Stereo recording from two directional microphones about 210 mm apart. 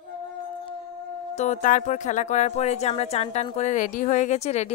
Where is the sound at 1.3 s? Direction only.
35° left (ahead or behind).